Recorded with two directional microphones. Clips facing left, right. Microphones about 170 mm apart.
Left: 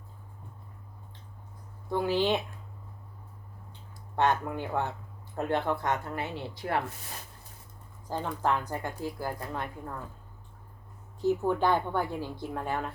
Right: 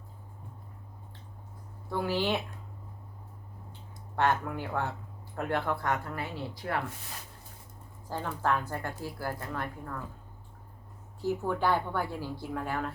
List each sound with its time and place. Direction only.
1.9 s a woman's voice: 20° left (ahead or behind)
3.7 s a sound: 20° left (ahead or behind)
5.4 s a woman's voice: 20° left (ahead or behind)
8.0 s a woman's voice: 15° left (ahead or behind)
11.2 s a woman's voice: 20° left (ahead or behind)